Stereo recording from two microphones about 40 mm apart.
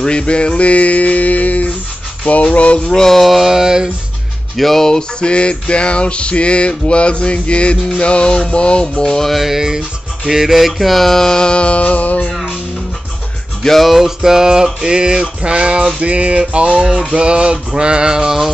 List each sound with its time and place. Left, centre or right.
0.0 s music: left
2.9 s music: centre
3.2 s music: centre
3.5 s a sound: centre
4.6 s music: centre; by 9.1 s left
9.1 s music: centre
9.4 s music: centre
11.5 s music: left
13.6 s music: centre
13.8 s a sound: centre